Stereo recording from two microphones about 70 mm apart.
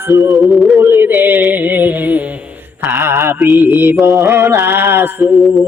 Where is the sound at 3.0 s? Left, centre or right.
Right.